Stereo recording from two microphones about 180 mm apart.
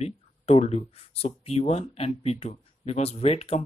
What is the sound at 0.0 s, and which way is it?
Speech, 35° left (ahead or behind).